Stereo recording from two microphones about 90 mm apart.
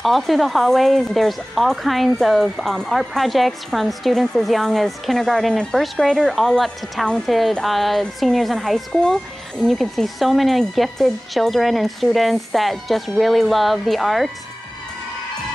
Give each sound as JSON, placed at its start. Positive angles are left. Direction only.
{"t": 0.0, "sound": "speech", "side_deg": 0}